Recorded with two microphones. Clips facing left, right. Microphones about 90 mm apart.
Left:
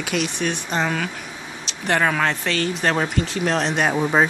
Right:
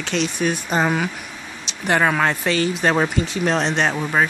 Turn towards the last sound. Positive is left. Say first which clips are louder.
# left 1 dB
turn(degrees=10)  # may be behind; listen again after turning